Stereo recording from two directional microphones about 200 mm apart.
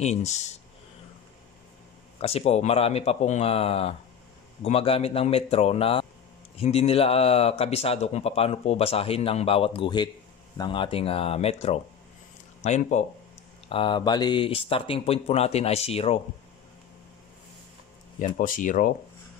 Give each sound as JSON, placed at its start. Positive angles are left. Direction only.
{"t": 0.0, "sound": "speech", "side_deg": 35}
{"t": 2.2, "sound": "speech", "side_deg": 30}
{"t": 13.7, "sound": "speech", "side_deg": 25}
{"t": 18.2, "sound": "speech", "side_deg": 40}